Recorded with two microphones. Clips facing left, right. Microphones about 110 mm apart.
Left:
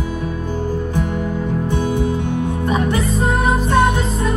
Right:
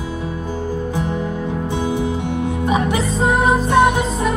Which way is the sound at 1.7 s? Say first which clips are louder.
Even; 20° right (ahead or behind).